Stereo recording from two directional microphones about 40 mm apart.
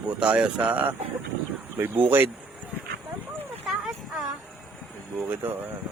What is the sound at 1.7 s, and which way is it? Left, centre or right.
Speech, right.